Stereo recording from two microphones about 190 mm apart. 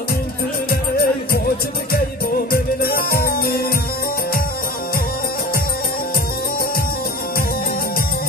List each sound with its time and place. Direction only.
0.7 s music: 55° left (ahead or behind)
2.5 s music: 50° left (ahead or behind)